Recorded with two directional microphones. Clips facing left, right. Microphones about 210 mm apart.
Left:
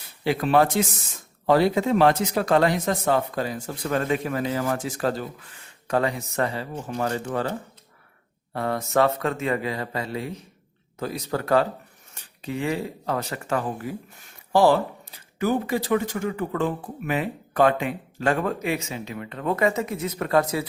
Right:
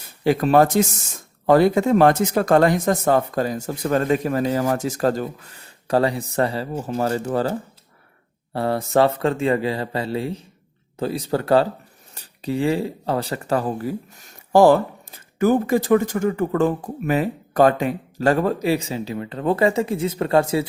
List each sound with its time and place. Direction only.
0.3 s speech: 45° right (ahead or behind)
8.5 s speech: 30° right (ahead or behind)